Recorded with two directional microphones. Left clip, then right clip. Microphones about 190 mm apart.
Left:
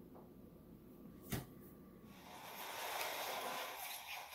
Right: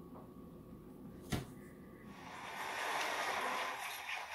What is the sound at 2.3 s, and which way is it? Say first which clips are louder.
Vehicle: right 6 dB; 15° right (ahead or behind).